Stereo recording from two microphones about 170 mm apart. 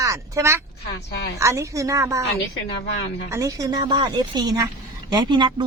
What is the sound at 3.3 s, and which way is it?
A woman's voice, 20° right (ahead or behind).